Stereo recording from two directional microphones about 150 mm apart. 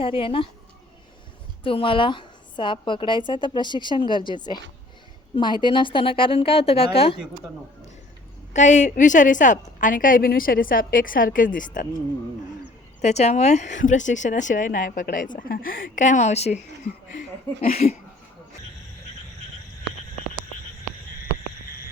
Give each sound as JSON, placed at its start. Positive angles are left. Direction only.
{"t": 0.0, "sound": "a woman's voice", "side_deg": 35}
{"t": 1.6, "sound": "a woman's voice", "side_deg": 35}
{"t": 8.5, "sound": "speech", "side_deg": 55}
{"t": 13.0, "sound": "speech", "side_deg": 50}
{"t": 17.6, "sound": "speech", "side_deg": 45}